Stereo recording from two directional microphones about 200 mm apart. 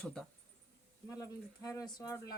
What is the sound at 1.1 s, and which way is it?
Speech, 15° left (ahead or behind).